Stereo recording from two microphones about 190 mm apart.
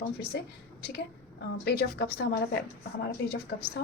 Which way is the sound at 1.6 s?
60° left (ahead or behind).